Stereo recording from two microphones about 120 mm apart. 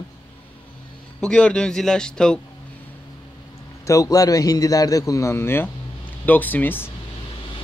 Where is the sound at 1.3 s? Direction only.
10° left (ahead or behind).